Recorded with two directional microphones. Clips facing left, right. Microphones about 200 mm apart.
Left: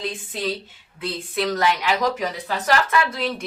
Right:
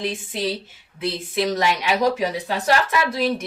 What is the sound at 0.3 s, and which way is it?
Speech, 25° right (ahead or behind).